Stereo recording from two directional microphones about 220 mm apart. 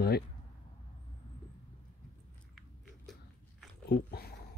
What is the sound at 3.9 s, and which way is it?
Dog, 45° left (ahead or behind).